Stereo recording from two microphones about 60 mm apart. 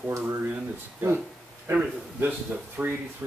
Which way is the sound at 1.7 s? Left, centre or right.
Right.